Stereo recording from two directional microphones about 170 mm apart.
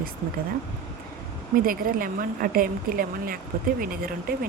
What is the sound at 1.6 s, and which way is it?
Speech, 55° right (ahead or behind).